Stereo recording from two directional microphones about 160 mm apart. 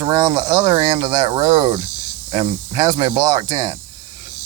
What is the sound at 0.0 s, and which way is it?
Speech, 25° right (ahead or behind).